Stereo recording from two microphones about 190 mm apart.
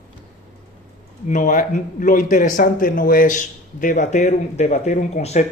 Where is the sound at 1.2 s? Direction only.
45° left (ahead or behind).